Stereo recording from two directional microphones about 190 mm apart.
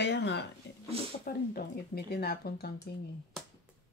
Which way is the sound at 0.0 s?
65° left (ahead or behind).